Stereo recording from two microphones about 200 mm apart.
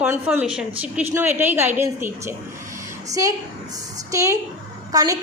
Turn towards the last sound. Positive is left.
turn(degrees=-15)  # may be behind; listen again after turning